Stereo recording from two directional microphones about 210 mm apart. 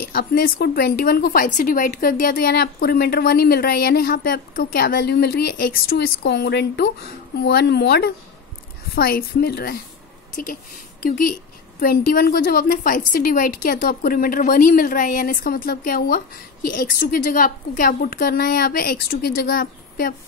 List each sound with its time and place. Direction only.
0.0 s a woman's voice: 45° left (ahead or behind)